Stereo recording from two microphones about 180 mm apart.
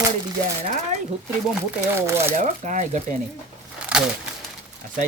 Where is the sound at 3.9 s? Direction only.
5° right (ahead or behind).